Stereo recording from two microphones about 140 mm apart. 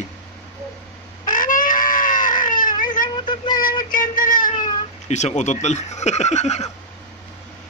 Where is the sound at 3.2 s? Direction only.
30° left (ahead or behind).